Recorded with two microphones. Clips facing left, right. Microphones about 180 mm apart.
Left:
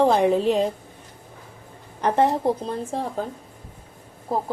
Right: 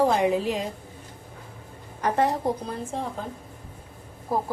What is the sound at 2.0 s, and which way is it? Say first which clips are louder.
Speech: left 4 dB; 20° left (ahead or behind).